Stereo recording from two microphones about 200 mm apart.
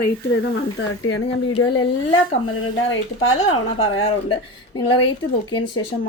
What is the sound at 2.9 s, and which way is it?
Speech, 90° left.